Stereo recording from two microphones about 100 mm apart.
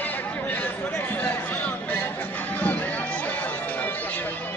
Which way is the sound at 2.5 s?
15° left (ahead or behind).